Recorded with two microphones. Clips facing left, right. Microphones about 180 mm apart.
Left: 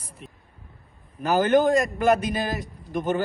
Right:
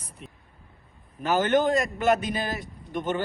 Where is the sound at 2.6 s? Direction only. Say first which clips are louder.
Left 3 dB; 40° left (ahead or behind).